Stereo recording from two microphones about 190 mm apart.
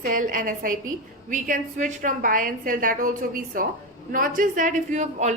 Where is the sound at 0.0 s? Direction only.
45° right (ahead or behind).